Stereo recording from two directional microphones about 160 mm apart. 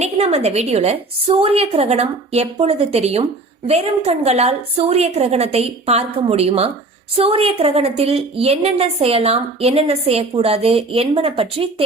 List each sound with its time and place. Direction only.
0.0 s a woman's voice: 45° right (ahead or behind)